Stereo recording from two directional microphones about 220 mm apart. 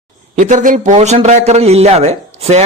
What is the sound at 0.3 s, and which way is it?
A man's voice, 35° right (ahead or behind).